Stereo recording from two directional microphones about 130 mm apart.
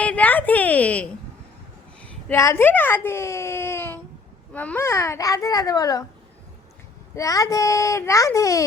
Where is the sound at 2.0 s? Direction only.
20° left (ahead or behind).